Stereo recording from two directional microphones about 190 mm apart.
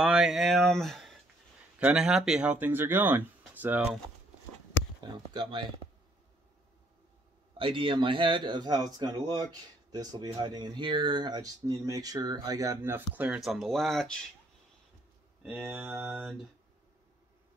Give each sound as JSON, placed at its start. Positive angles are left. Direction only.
{"t": 0.0, "sound": "speech", "side_deg": 0}
{"t": 5.0, "sound": "speech", "side_deg": -20}
{"t": 7.5, "sound": "speech", "side_deg": -25}
{"t": 15.4, "sound": "speech", "side_deg": 0}